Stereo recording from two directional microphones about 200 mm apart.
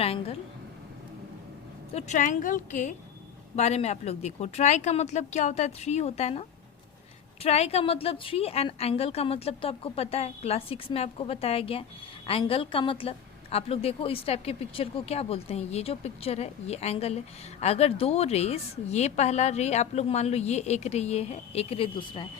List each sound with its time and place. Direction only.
0.0 s a woman's voice: 30° left (ahead or behind)
1.9 s a woman's voice: 35° left (ahead or behind)
7.4 s a woman's voice: 30° left (ahead or behind)